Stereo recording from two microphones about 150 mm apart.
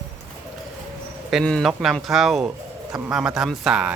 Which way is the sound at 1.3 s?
Centre (ahead or behind).